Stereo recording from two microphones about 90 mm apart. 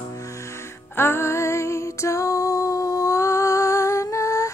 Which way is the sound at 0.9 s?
25° left (ahead or behind).